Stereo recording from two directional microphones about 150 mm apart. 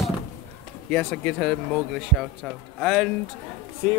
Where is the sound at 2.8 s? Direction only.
Centre (ahead or behind).